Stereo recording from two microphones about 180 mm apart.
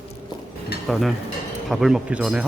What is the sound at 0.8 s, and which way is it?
Speech, centre (ahead or behind).